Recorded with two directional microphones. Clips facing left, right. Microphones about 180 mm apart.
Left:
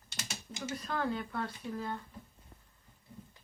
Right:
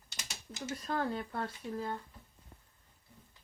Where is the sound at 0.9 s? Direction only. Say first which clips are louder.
Right 1 dB; 35° right (ahead or behind).